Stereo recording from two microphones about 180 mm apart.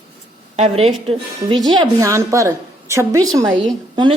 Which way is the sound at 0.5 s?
35° right (ahead or behind).